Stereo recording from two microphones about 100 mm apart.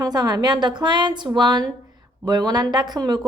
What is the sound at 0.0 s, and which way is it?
A woman's voice, 45° right (ahead or behind).